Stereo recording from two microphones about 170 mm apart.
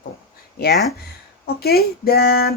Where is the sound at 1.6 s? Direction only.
65° left (ahead or behind).